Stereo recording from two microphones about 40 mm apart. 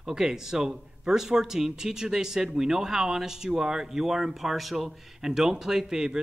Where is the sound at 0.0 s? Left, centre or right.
Centre.